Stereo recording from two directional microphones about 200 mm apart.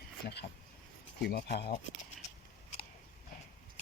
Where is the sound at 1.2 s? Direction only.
55° left (ahead or behind).